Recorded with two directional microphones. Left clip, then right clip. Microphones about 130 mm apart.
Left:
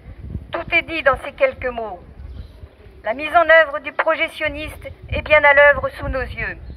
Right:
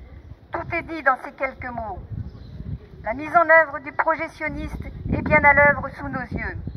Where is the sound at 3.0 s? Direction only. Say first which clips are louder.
Left 3 dB; 55° left (ahead or behind).